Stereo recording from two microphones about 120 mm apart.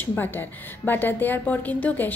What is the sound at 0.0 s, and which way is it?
A woman's voice, 15° left (ahead or behind).